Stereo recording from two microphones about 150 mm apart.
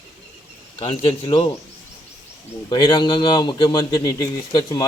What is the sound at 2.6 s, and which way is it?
Speech, 30° left (ahead or behind).